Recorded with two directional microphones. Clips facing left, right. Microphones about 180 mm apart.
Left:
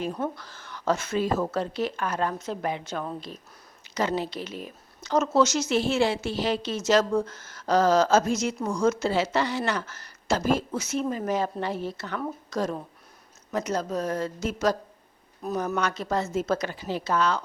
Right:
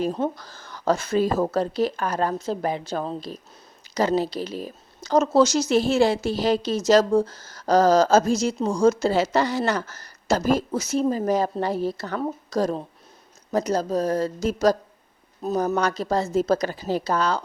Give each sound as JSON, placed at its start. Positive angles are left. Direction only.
{"t": 0.3, "sound": "a woman's voice", "side_deg": -40}